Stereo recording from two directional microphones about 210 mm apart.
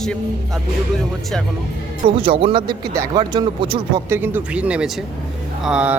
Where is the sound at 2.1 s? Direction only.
25° right (ahead or behind).